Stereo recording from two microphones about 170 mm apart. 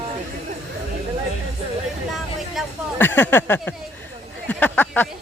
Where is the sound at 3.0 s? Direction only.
10° left (ahead or behind).